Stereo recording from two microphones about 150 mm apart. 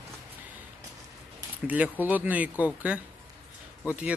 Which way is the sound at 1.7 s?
10° right (ahead or behind).